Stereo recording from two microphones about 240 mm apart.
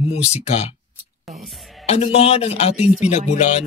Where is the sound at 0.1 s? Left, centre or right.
Left.